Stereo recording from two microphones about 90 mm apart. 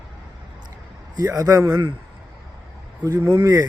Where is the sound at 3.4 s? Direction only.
40° right (ahead or behind).